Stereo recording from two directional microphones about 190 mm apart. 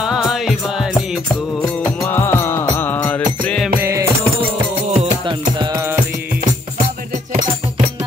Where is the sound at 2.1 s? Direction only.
10° left (ahead or behind).